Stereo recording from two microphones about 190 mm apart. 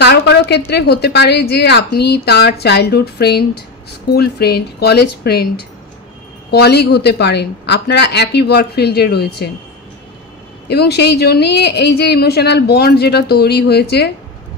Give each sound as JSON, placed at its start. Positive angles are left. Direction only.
{"t": 0.0, "sound": "a sound", "side_deg": 60}
{"t": 0.7, "sound": "a woman's voice", "side_deg": 60}
{"t": 6.5, "sound": "a woman's voice", "side_deg": 60}
{"t": 10.7, "sound": "a woman's voice", "side_deg": 60}